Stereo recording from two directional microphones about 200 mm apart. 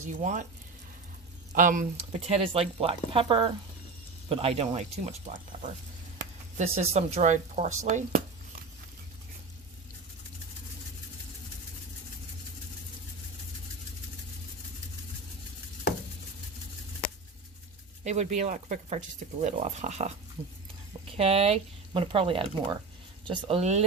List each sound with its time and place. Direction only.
0.0 s speech: 40° right (ahead or behind)
1.5 s speech: 40° right (ahead or behind)
18.0 s speech: 35° right (ahead or behind)
20.4 s speech: 10° right (ahead or behind)
21.2 s speech: 30° right (ahead or behind)